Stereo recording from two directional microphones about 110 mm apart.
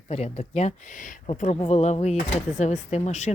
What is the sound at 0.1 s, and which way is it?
Speech, 90° left.